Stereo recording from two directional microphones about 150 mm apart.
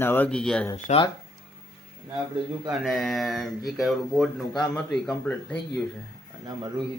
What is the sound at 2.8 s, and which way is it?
Speech, centre (ahead or behind).